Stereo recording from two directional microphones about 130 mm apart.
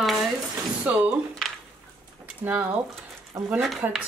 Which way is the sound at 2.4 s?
10° right (ahead or behind).